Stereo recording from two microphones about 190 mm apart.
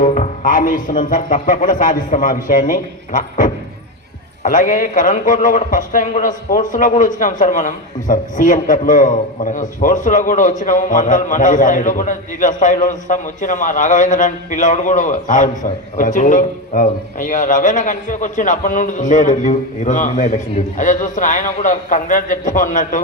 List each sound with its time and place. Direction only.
0.0 s a man's voice: 40° left (ahead or behind)